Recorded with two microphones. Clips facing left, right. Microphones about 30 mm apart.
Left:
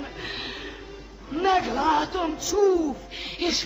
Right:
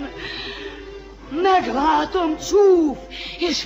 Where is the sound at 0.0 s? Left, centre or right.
Centre.